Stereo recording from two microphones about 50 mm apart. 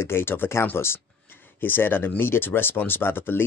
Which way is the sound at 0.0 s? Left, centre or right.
Left.